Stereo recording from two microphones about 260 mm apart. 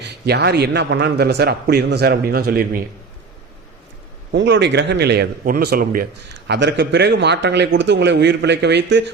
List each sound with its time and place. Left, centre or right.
0.0 s a man's voice: right
4.3 s a man's voice: right